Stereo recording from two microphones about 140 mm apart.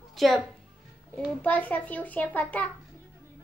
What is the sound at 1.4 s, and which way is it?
A child's voice, 10° left (ahead or behind).